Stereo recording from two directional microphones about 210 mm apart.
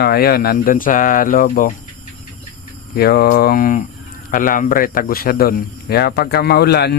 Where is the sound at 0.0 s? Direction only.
50° left (ahead or behind).